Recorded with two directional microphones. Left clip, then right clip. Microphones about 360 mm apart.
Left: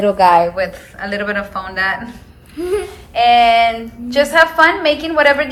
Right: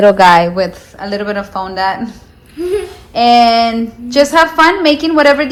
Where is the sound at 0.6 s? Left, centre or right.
Centre.